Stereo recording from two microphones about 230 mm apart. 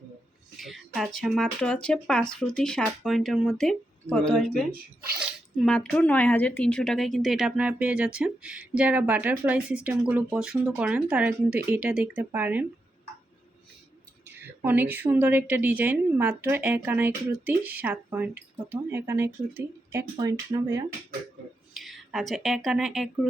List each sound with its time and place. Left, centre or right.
0.6 s speech: centre
14.3 s a woman's voice: centre
21.7 s speech: centre